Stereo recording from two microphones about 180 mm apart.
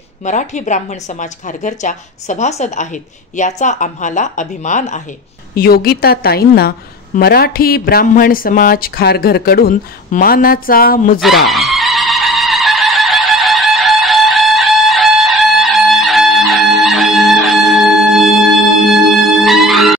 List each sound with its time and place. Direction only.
0.2 s a woman's voice: 45° left (ahead or behind)
5.5 s speech: 55° left (ahead or behind)
11.1 s fowl: centre (ahead or behind)